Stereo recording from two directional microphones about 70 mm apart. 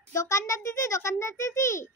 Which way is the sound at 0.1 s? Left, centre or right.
Left.